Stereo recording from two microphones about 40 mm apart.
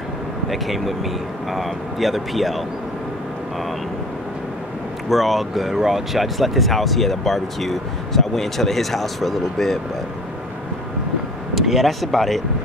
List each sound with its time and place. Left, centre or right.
0.5 s speech: centre
5.1 s speech: centre
11.5 s speech: centre